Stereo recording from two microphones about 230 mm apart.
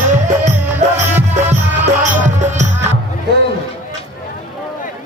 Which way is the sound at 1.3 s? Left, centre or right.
Right.